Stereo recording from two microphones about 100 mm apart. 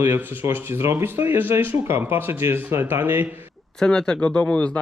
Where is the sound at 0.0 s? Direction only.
20° right (ahead or behind).